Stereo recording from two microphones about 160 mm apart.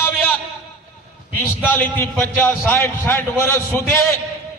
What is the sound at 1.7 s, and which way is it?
A man's voice, 15° left (ahead or behind).